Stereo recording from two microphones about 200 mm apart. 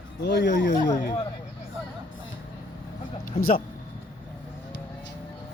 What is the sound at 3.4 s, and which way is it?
Speech, 30° left (ahead or behind).